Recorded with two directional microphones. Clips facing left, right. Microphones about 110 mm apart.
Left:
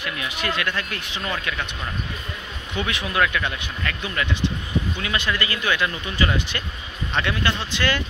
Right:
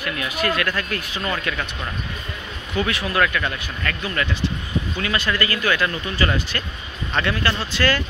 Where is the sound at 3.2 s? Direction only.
10° left (ahead or behind).